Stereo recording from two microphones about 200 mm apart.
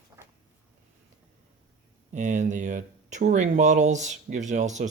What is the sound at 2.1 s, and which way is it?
Speech, 35° right (ahead or behind).